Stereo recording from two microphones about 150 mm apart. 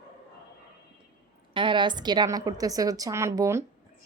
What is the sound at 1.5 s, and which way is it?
A woman's voice, 35° right (ahead or behind).